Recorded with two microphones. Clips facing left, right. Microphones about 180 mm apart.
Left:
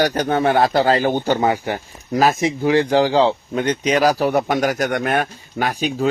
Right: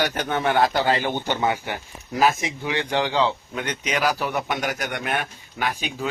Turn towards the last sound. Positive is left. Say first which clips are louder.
# left 7 dB
turn(degrees=45)  # may be behind; listen again after turning